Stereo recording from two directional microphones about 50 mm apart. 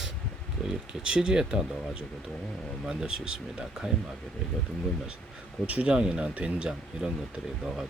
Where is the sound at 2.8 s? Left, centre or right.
Centre.